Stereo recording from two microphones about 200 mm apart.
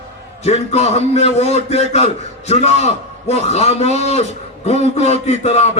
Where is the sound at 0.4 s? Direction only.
35° left (ahead or behind).